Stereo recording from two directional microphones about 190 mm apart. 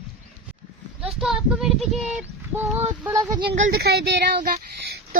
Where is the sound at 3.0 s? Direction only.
20° right (ahead or behind).